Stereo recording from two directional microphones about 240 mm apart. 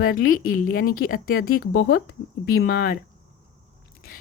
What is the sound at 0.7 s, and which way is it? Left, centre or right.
Speech, left.